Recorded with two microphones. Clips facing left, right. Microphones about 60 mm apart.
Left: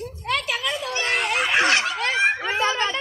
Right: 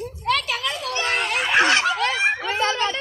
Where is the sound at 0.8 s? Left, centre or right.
Centre.